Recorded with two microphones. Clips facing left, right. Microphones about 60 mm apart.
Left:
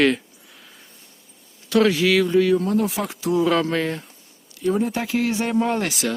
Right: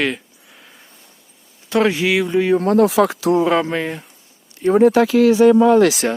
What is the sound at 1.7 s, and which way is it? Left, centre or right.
Speech, right.